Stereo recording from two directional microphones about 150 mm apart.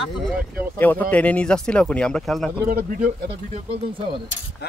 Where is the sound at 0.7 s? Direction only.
10° left (ahead or behind).